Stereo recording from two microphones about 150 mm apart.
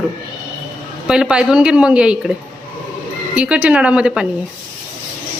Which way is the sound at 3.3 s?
10° right (ahead or behind).